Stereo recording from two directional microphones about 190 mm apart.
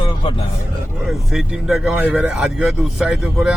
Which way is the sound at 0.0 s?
30° left (ahead or behind).